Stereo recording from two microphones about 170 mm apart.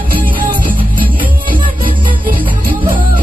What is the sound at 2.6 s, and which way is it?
Music, 55° right (ahead or behind).